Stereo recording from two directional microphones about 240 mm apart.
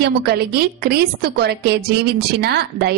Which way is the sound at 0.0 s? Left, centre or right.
Right.